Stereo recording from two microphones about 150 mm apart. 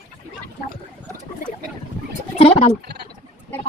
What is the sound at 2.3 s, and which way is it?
Speech, 45° left (ahead or behind).